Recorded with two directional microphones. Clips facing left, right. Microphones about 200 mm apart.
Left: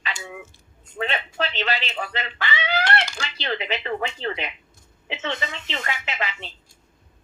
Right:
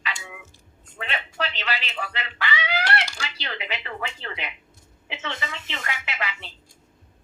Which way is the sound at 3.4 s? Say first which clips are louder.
Left 8 dB; 25° left (ahead or behind).